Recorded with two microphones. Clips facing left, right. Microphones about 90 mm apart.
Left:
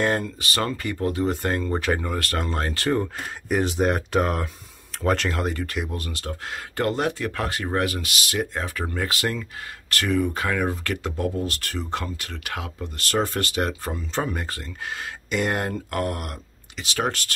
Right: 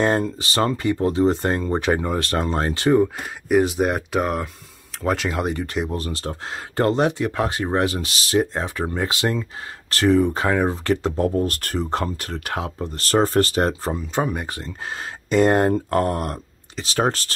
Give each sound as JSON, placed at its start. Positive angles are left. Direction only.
{"t": 0.0, "sound": "speech", "side_deg": -25}
{"t": 3.0, "sound": "speech", "side_deg": -5}
{"t": 13.9, "sound": "speech", "side_deg": -15}